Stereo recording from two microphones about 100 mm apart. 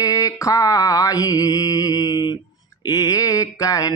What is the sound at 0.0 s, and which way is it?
Mantra, 35° left (ahead or behind).